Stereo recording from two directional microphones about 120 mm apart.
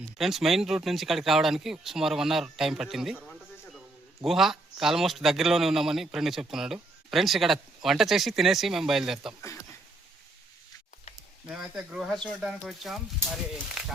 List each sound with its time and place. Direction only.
0.2 s a man's voice: centre (ahead or behind)
11.4 s a man's voice: 5° right (ahead or behind)